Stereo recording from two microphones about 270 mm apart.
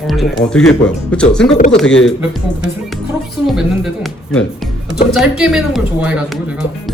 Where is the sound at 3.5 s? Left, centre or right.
Centre.